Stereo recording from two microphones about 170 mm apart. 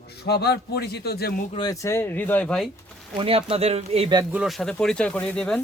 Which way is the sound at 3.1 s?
35° right (ahead or behind).